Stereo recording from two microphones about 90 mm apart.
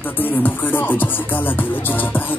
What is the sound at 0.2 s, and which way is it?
Music, 20° left (ahead or behind).